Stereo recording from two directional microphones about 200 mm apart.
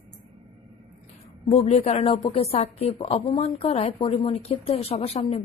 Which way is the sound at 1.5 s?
30° left (ahead or behind).